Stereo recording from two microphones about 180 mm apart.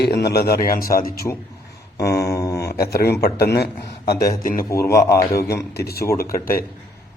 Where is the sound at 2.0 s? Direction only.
15° left (ahead or behind).